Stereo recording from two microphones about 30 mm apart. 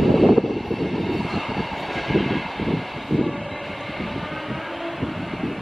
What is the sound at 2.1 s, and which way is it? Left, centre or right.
Vehicle, centre.